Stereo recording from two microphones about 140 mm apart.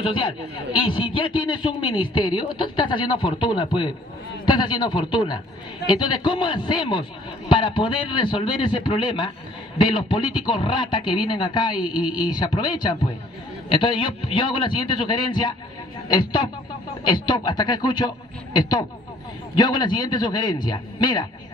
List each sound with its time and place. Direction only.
0.7 s a man's voice: 35° left (ahead or behind)